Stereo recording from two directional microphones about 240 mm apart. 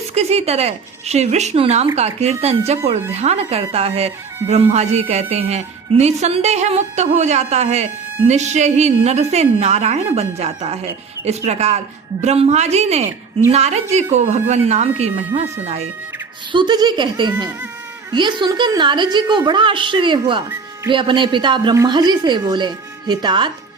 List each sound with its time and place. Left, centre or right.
0.1 s a woman's voice: right